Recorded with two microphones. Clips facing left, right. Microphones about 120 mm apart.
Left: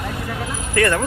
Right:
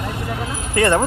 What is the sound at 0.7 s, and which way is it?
Speech, 25° right (ahead or behind).